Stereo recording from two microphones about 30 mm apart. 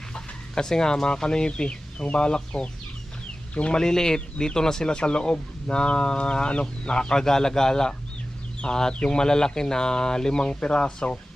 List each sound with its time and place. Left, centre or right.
0.1 s chicken: left
1.0 s speech: left
3.8 s speech: left
4.9 s speech: left
6.9 s speech: left